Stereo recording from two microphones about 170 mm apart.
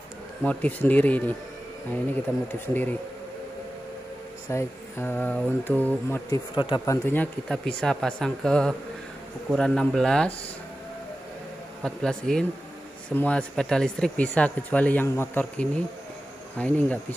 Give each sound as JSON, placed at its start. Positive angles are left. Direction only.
{"t": 0.4, "sound": "speech", "side_deg": 10}
{"t": 2.7, "sound": "speech", "side_deg": 10}
{"t": 4.5, "sound": "speech", "side_deg": 15}
{"t": 6.5, "sound": "speech", "side_deg": 25}
{"t": 7.1, "sound": "speech", "side_deg": 10}
{"t": 11.8, "sound": "speech", "side_deg": 5}